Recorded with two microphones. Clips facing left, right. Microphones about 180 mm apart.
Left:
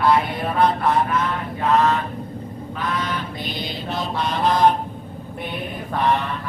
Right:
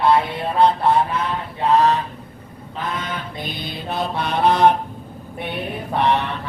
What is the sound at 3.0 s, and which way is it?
Mantra, 55° right (ahead or behind).